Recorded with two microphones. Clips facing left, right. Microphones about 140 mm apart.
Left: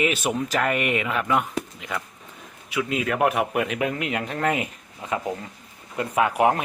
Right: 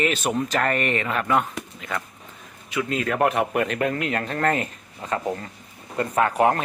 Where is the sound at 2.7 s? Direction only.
10° left (ahead or behind).